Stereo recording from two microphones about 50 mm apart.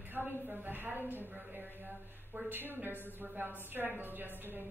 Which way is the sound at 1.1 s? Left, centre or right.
Right.